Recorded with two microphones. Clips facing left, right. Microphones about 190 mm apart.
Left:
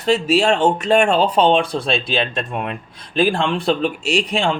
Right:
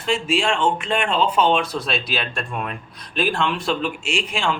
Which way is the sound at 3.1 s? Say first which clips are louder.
Left 5 dB; 30° left (ahead or behind).